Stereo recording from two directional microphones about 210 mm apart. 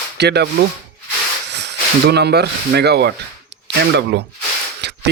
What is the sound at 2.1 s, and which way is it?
Speech, 50° right (ahead or behind).